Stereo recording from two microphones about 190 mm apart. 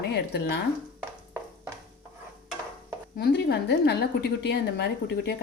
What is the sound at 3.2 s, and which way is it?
A woman's voice, 60° left (ahead or behind).